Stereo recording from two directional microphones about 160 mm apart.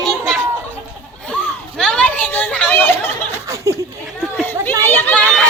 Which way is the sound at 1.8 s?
5° left (ahead or behind).